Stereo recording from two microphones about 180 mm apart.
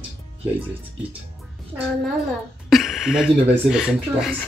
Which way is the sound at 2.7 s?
Centre (ahead or behind).